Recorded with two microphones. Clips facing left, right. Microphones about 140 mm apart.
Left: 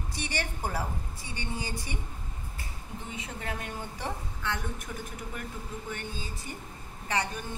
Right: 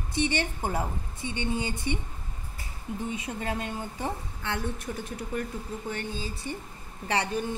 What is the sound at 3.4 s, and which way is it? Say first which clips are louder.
A woman's voice: right 4 dB; 25° right (ahead or behind).